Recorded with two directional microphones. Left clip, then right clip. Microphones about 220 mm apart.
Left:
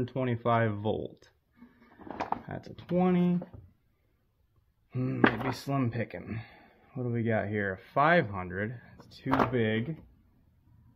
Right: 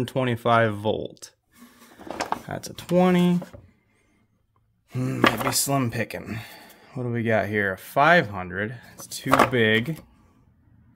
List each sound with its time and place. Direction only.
0.0 s speech: 25° right (ahead or behind)
2.4 s speech: 20° right (ahead or behind)
4.9 s speech: 20° right (ahead or behind)